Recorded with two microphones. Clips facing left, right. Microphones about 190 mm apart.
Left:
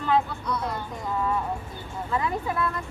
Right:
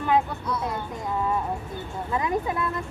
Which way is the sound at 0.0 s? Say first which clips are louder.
Right 1 dB; 15° right (ahead or behind).